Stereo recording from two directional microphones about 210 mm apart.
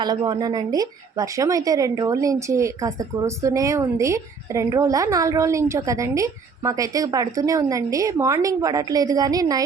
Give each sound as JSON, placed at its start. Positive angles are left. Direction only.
{"t": 0.0, "sound": "speech", "side_deg": -20}